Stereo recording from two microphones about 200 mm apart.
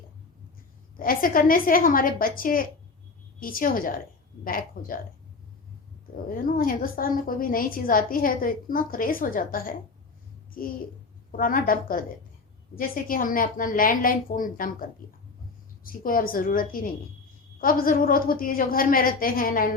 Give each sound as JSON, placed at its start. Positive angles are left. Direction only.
{"t": 0.9, "sound": "a woman's voice", "side_deg": 45}
{"t": 6.1, "sound": "a woman's voice", "side_deg": 45}